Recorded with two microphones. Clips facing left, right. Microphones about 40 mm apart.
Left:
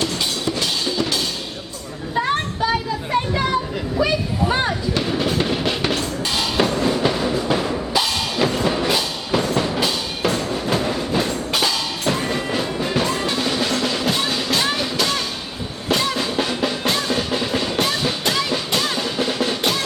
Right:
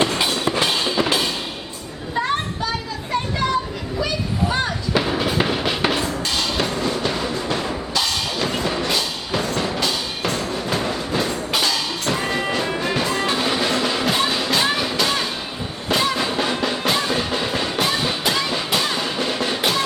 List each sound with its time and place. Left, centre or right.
0.0 s music: right
2.1 s a sound: centre
4.0 s children playing: centre
4.9 s music: centre
6.3 s drum kit: centre
8.4 s music: centre